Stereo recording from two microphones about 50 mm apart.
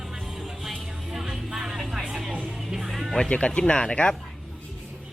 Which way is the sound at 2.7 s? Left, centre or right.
Centre.